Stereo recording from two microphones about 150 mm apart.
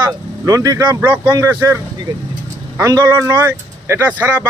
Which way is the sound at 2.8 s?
20° right (ahead or behind).